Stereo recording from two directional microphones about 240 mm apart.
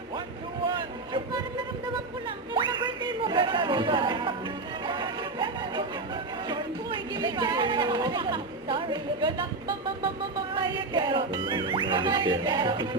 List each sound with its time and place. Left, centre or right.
0.7 s vehicle: centre
2.5 s music: centre
7.2 s a sound: centre
10.5 s music: centre